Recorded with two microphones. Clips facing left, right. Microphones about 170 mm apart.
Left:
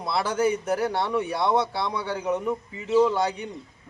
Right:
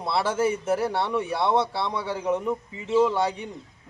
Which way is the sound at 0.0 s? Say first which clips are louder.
Even; centre (ahead or behind).